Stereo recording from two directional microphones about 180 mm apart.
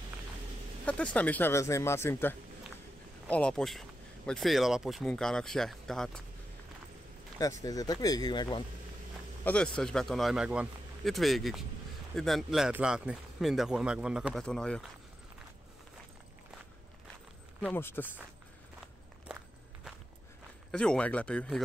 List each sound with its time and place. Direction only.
0.8 s speech: 5° left (ahead or behind)
7.6 s speech: 20° left (ahead or behind)
9.4 s speech: 5° left (ahead or behind)
17.6 s speech: 10° left (ahead or behind)
20.7 s speech: 5° left (ahead or behind)